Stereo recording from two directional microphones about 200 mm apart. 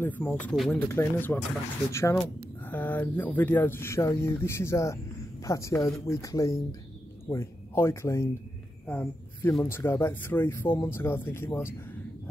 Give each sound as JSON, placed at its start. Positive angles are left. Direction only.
{"t": 0.0, "sound": "speech", "side_deg": 10}